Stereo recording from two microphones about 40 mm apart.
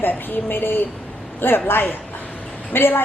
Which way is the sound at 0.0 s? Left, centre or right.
Left.